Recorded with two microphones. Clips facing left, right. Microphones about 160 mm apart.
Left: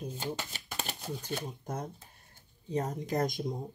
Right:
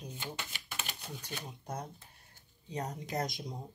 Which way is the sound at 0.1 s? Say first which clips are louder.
Left 6 dB; 40° left (ahead or behind).